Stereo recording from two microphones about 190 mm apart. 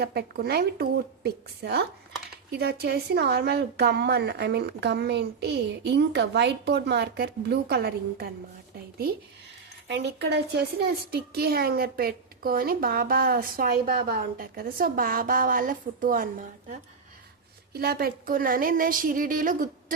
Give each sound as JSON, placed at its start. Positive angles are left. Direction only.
{"t": 0.0, "sound": "speech", "side_deg": -55}
{"t": 9.9, "sound": "a woman's voice", "side_deg": -65}
{"t": 17.7, "sound": "a woman's voice", "side_deg": -55}